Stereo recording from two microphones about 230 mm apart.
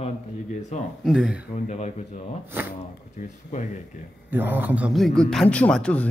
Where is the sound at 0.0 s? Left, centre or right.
Left.